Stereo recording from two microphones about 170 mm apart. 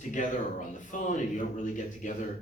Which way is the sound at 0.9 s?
45° left (ahead or behind).